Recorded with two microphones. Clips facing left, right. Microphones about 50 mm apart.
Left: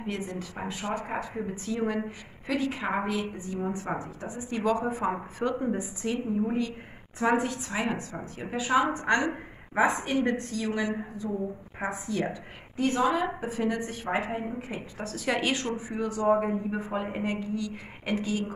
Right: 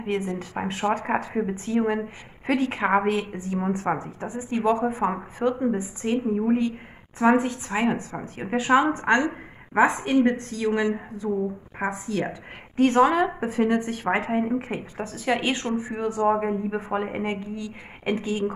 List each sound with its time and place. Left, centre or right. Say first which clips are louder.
0.0 s a woman's voice: right 6 dB; right
0.9 s a woman's voice: right 7 dB; right
2.4 s speech: right 6 dB; right
4.0 s a woman's voice: right 4 dB; right
4.5 s a woman's voice: right 4 dB; right
6.0 s a woman's voice: right 6 dB; right
7.2 s a woman's voice: right 5 dB; right
8.1 s a woman's voice: right 6 dB; right
12.7 s speech: right 7 dB; right
15.1 s speech: right 3 dB; centre
15.8 s a woman's voice: right 4 dB; right
17.6 s a woman's voice: left 1 dB; right